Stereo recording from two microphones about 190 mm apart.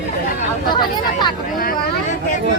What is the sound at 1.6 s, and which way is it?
Speech, 50° left (ahead or behind).